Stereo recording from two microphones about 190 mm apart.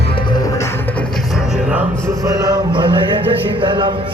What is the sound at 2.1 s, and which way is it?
Music, 20° right (ahead or behind).